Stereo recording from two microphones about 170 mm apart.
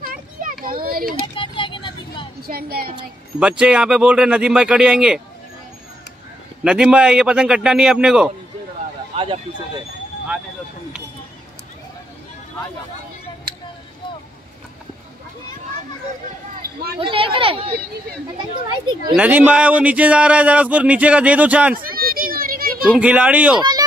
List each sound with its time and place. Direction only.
0.0 s children playing: 50° right (ahead or behind)
1.3 s vehicle: 30° left (ahead or behind)
2.4 s a woman's voice: 60° right (ahead or behind)
3.3 s speech: 5° right (ahead or behind)
6.6 s a man's voice: 5° right (ahead or behind)
9.1 s speech: 35° right (ahead or behind)
17.0 s a sound: 30° right (ahead or behind)
19.1 s speech: 10° right (ahead or behind)
21.7 s a sound: 60° right (ahead or behind)
22.9 s speech: 10° right (ahead or behind)